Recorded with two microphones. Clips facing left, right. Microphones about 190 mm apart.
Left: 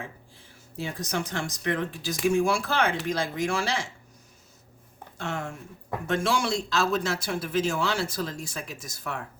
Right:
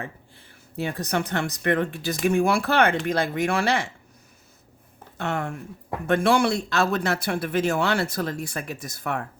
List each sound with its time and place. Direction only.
0.0 s speech: 60° right (ahead or behind)
5.1 s speech: 60° right (ahead or behind)